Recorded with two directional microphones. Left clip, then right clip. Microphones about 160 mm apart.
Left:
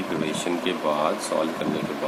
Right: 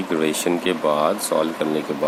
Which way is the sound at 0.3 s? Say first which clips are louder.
Right 5 dB; 70° right (ahead or behind).